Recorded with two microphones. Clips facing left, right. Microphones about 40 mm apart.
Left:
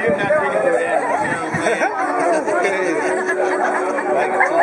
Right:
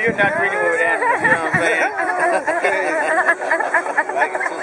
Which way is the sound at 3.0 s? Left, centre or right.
Centre.